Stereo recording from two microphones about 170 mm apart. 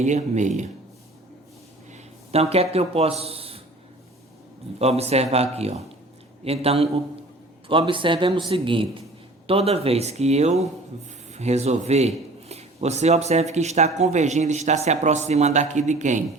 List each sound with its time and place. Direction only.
0.0 s speech: 45° right (ahead or behind)
1.9 s a sound: 35° right (ahead or behind)
4.8 s a man's voice: 40° right (ahead or behind)